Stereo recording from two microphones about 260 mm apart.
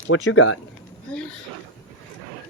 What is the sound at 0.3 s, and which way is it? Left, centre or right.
Speech, left.